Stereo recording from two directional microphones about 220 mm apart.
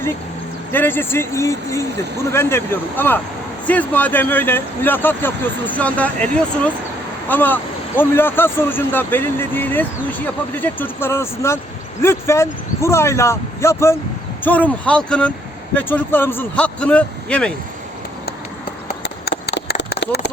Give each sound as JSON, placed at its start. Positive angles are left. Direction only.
{"t": 0.7, "sound": "speech", "side_deg": 10}
{"t": 19.0, "sound": "clip-clop", "side_deg": 50}
{"t": 19.9, "sound": "a sound", "side_deg": 50}